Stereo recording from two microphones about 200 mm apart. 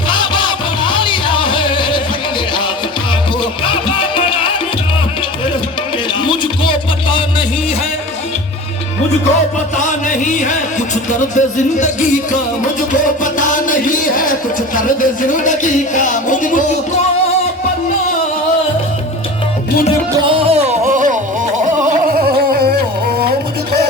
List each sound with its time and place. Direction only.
0.1 s music: 25° left (ahead or behind)
3.6 s music: 25° left (ahead or behind)
6.2 s music: 25° left (ahead or behind)
9.7 s music: 40° left (ahead or behind)
20.2 s music: 25° right (ahead or behind)
21.6 s gargling: 40° right (ahead or behind)